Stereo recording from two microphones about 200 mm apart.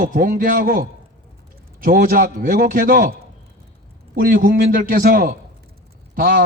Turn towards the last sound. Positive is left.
turn(degrees=-45)  # may be behind; listen again after turning